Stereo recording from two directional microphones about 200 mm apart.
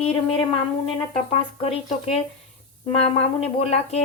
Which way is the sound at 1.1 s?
30° left (ahead or behind).